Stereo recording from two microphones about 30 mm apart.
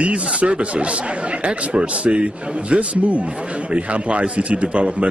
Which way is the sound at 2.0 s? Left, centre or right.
Right.